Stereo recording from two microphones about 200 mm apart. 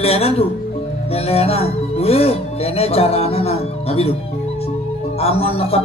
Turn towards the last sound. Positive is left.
turn(degrees=30)  # may be behind; listen again after turning